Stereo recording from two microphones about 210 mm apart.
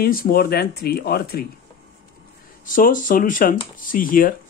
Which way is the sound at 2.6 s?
40° left (ahead or behind).